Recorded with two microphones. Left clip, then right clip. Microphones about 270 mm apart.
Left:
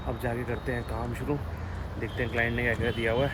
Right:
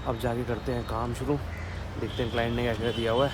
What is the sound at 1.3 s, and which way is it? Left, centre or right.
Speech, centre.